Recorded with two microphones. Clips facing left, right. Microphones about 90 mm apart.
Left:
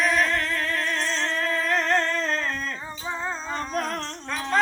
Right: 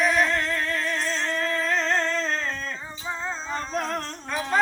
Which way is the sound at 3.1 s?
15° left (ahead or behind).